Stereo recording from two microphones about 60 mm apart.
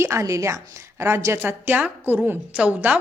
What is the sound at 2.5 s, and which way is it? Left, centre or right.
Speech, right.